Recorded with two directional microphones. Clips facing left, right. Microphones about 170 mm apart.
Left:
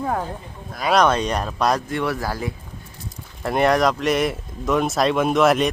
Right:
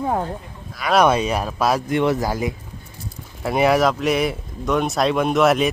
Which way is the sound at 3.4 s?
5° right (ahead or behind).